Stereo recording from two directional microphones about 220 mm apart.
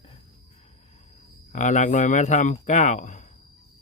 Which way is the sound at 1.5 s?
35° left (ahead or behind).